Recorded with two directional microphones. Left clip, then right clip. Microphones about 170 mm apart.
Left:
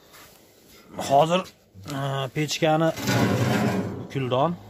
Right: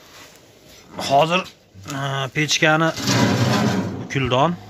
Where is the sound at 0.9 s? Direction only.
20° left (ahead or behind).